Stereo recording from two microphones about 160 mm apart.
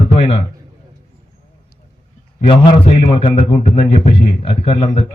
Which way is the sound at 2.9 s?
35° left (ahead or behind).